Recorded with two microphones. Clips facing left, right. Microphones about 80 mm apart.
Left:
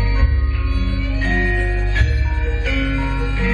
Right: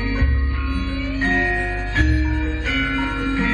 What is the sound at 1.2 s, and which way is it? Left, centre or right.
Music, right.